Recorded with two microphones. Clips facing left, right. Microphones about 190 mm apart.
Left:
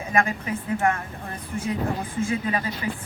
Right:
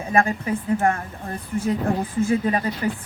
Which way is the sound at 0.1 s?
35° right (ahead or behind).